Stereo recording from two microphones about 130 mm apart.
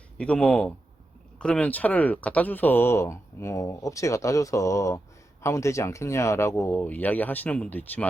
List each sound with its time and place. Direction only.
0.2 s speech: 10° left (ahead or behind)